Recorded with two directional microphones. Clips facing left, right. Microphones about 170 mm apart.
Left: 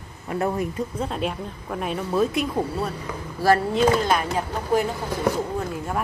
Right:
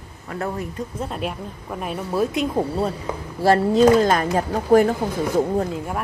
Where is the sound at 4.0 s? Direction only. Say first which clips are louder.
Right 4 dB; 45° right (ahead or behind).